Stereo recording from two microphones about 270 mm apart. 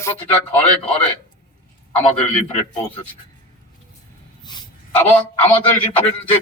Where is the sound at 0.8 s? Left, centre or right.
Centre.